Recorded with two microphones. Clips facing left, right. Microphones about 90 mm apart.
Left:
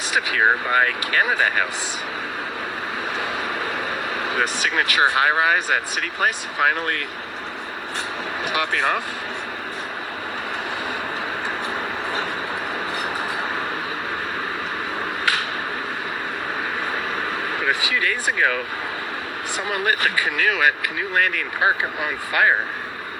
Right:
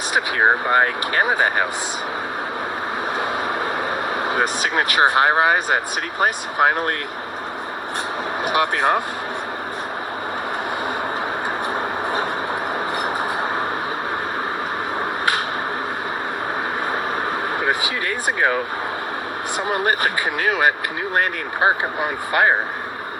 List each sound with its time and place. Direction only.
0.1 s speech: 35° right (ahead or behind)
4.2 s speech: 35° right (ahead or behind)
8.4 s speech: 40° right (ahead or behind)
17.6 s vehicle: 40° right (ahead or behind)
19.5 s speech: 35° right (ahead or behind)